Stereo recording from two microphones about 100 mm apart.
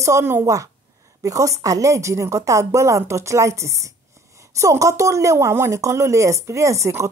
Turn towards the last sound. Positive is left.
turn(degrees=-30)  # may be behind; listen again after turning